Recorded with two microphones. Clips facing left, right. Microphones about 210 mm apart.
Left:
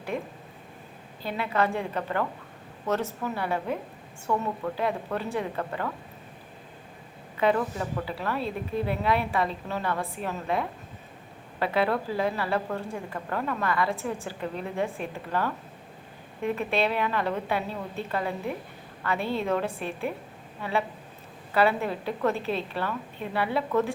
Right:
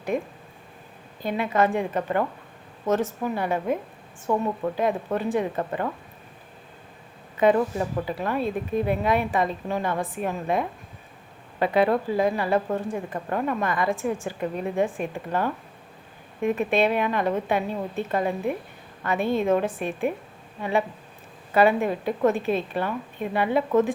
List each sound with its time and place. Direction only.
1.2 s a woman's voice: 15° right (ahead or behind)
7.3 s a woman's voice: 20° right (ahead or behind)